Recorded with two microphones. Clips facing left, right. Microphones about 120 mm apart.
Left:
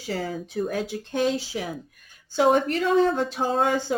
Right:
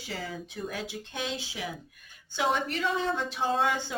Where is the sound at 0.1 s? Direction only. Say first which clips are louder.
Left 8 dB; 45° left (ahead or behind).